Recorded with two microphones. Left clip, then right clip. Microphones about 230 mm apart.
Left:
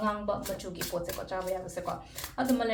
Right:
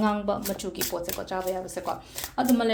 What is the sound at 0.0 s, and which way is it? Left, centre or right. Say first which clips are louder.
Speech: right 4 dB; right.